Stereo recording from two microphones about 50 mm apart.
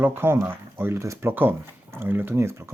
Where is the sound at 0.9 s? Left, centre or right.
Right.